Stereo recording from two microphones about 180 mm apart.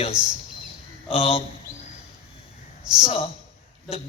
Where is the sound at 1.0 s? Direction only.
30° left (ahead or behind).